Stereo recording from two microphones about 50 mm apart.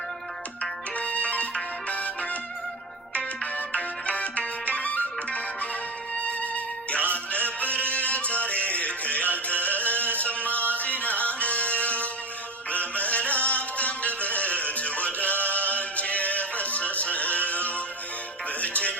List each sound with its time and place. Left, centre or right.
0.6 s music: left